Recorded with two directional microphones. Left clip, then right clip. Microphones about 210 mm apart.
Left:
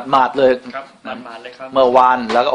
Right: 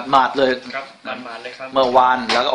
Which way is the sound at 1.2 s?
10° right (ahead or behind).